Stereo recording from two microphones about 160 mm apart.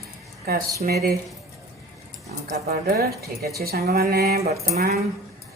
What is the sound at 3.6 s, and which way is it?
Speech, 75° right (ahead or behind).